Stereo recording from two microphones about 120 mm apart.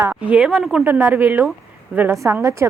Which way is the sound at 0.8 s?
20° right (ahead or behind).